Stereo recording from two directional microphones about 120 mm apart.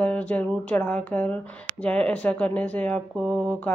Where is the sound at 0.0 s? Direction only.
10° left (ahead or behind).